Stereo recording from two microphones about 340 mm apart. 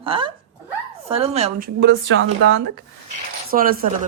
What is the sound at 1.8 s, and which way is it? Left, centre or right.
Speech, right.